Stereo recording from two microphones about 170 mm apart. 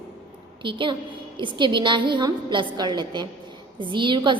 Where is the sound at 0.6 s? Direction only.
30° right (ahead or behind).